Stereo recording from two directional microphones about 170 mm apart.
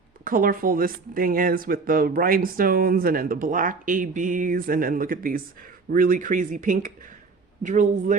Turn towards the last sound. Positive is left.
turn(degrees=-50)  # may be behind; listen again after turning